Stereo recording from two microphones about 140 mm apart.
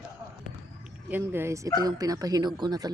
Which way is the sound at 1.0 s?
15° right (ahead or behind).